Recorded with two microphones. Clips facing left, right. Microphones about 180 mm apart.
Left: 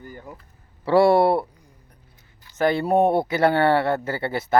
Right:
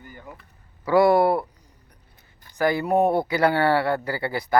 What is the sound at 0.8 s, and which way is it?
Speech, 30° left (ahead or behind).